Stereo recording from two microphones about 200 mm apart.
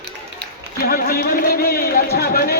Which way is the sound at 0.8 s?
45° left (ahead or behind).